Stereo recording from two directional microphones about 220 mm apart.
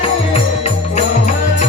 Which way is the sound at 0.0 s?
30° left (ahead or behind).